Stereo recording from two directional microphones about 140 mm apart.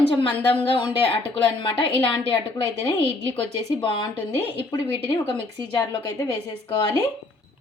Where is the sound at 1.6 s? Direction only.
35° left (ahead or behind).